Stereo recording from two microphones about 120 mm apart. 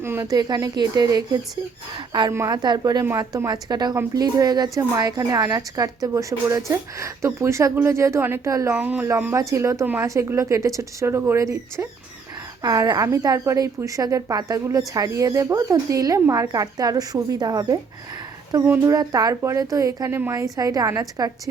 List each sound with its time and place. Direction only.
0.0 s speech: 20° right (ahead or behind)
0.3 s speech: 35° right (ahead or behind)
2.3 s a woman's voice: 20° right (ahead or behind)
2.6 s a woman's voice: 35° right (ahead or behind)
8.7 s a woman's voice: 15° right (ahead or behind); by 21.3 s 30° right (ahead or behind)